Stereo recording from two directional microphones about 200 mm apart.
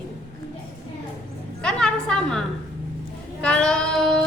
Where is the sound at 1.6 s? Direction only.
5° left (ahead or behind).